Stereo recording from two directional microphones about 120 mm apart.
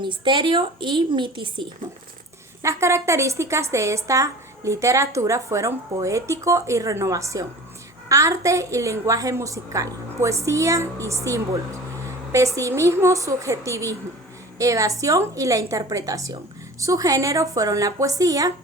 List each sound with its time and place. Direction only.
0.0 s a woman's voice: 40° right (ahead or behind)
2.6 s a woman's voice: 25° right (ahead or behind)